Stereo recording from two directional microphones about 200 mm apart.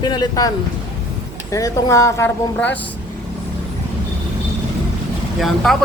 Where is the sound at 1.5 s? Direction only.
15° left (ahead or behind).